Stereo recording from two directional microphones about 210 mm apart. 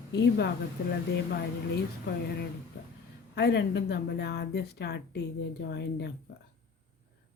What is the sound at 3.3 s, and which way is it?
Speech, 55° left (ahead or behind).